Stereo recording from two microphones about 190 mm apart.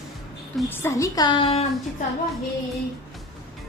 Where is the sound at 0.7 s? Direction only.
10° left (ahead or behind); by 1.6 s 30° left (ahead or behind).